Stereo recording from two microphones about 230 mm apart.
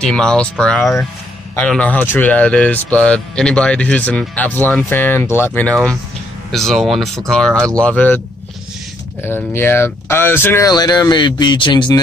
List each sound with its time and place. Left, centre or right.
0.0 s speech: centre
9.2 s speech: centre